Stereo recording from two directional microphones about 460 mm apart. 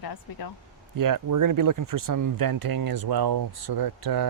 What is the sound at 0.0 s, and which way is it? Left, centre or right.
Speech, left.